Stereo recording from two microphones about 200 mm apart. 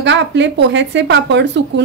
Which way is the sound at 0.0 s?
65° right (ahead or behind).